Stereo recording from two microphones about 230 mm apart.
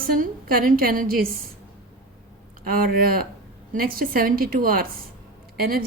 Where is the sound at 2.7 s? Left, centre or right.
Right.